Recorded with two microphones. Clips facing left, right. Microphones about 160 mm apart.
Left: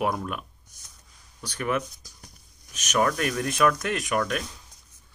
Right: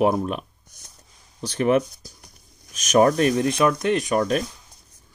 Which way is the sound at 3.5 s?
20° right (ahead or behind).